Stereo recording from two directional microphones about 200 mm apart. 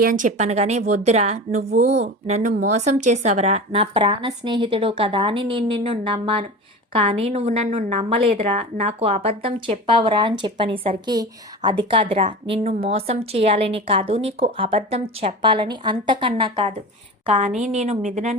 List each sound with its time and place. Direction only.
0.0 s a woman's voice: 40° right (ahead or behind)